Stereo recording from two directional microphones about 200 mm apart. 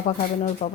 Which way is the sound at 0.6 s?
30° left (ahead or behind).